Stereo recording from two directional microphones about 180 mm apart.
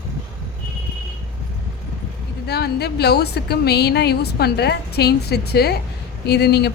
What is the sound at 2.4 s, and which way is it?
A woman's voice, 65° left (ahead or behind).